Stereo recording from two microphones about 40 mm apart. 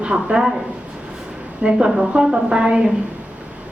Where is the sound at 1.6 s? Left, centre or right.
Right.